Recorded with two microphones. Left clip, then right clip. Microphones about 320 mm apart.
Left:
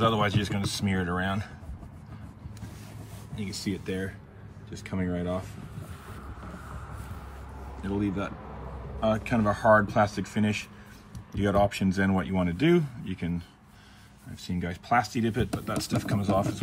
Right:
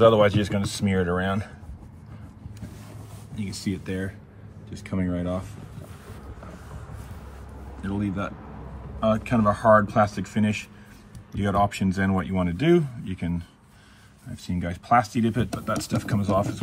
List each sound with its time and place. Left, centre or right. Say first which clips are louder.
0.0 s speech: right 8 dB; centre
3.3 s speech: right 2 dB; centre
5.0 s speech: right 2 dB; right
7.8 s speech: right 1 dB; centre